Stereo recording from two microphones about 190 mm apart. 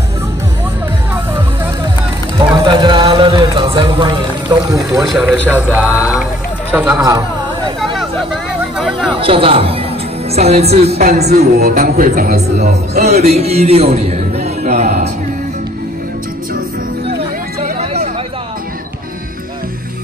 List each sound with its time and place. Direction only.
2.3 s music: 25° right (ahead or behind)
4.9 s speech: centre (ahead or behind)
7.1 s a sound: 20° right (ahead or behind)
7.8 s a sound: centre (ahead or behind)
9.2 s a man's voice: 30° right (ahead or behind)
11.0 s a man's voice: 55° right (ahead or behind)
13.1 s a man's voice: 35° right (ahead or behind)
14.4 s music: 35° right (ahead or behind)